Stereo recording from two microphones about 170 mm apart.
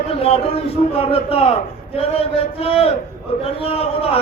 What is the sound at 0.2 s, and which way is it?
A man's voice, 35° left (ahead or behind).